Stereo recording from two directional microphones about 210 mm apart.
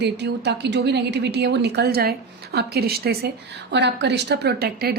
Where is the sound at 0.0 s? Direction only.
55° right (ahead or behind).